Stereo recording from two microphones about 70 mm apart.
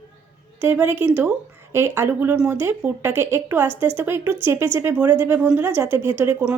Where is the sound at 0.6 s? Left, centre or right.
Right.